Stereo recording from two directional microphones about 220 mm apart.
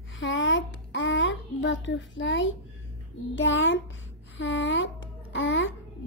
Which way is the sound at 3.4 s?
55° left (ahead or behind).